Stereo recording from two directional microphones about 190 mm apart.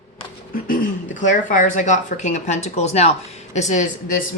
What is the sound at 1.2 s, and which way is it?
Speech, 40° left (ahead or behind).